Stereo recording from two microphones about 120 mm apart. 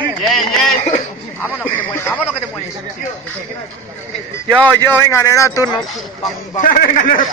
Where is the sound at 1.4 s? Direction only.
15° left (ahead or behind).